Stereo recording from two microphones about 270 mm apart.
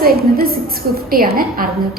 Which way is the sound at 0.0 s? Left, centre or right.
Right.